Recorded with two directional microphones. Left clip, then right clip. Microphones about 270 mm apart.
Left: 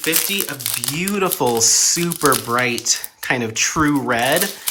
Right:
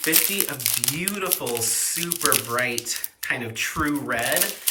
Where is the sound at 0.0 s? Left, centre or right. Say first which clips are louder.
Left 3 dB; centre.